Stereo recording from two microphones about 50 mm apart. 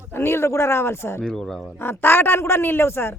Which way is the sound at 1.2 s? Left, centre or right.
Centre.